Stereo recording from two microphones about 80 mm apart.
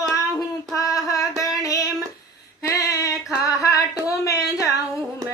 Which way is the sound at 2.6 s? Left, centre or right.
Left.